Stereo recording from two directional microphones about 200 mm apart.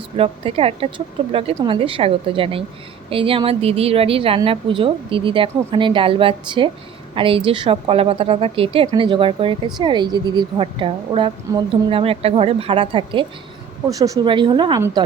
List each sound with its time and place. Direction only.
0.2 s a woman's voice: 30° right (ahead or behind)